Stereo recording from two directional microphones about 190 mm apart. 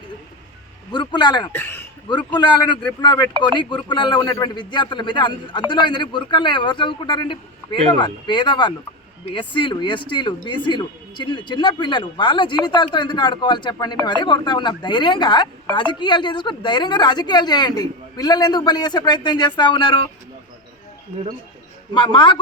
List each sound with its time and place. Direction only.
0.9 s speech: 25° left (ahead or behind)
1.5 s speech: 10° left (ahead or behind)
2.4 s speech: 25° left (ahead or behind)
21.9 s speech: 25° left (ahead or behind)